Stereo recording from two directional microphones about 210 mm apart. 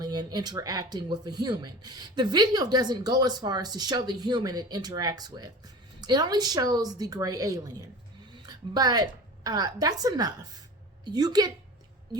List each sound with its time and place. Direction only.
0.0 s a woman's voice: 20° right (ahead or behind)